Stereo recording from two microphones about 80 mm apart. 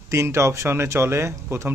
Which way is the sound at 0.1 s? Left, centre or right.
Right.